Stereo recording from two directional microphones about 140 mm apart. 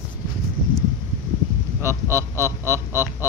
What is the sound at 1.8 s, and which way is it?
Speech, 20° right (ahead or behind).